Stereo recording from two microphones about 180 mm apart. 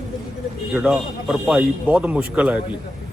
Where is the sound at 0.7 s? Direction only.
5° right (ahead or behind).